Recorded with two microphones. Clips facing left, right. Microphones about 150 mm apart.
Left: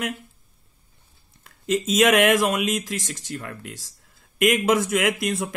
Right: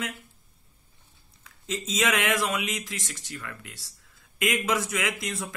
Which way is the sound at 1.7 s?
65° left (ahead or behind).